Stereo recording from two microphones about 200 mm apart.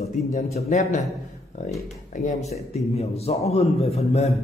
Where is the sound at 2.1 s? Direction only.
35° left (ahead or behind).